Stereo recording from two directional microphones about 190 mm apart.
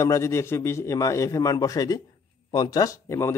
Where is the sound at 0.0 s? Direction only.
15° left (ahead or behind).